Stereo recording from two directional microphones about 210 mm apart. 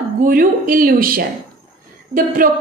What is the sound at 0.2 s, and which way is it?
A woman's voice, 45° right (ahead or behind).